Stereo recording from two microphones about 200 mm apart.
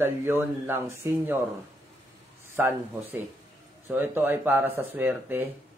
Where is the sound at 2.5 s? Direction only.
10° right (ahead or behind).